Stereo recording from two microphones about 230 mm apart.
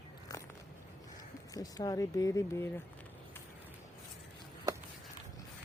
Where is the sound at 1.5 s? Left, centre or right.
Centre.